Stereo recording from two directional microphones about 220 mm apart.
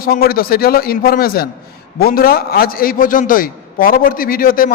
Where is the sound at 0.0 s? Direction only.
40° left (ahead or behind).